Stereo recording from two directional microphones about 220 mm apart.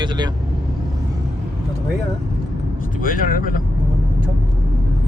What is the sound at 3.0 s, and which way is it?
Speech, 40° left (ahead or behind).